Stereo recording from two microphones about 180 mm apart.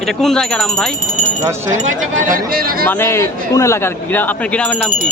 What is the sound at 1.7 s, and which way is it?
Speech, 45° right (ahead or behind).